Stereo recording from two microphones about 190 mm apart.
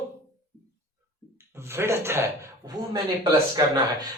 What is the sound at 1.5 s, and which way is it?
Speech, 10° right (ahead or behind).